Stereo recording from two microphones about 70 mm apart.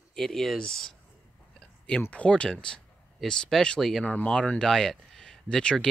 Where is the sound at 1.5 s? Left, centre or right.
Centre.